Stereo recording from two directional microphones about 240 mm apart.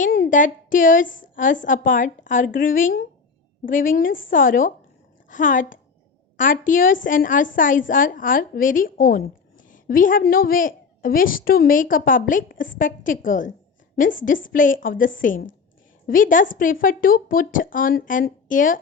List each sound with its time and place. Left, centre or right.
0.3 s a woman's voice: left
14.5 s a woman's voice: left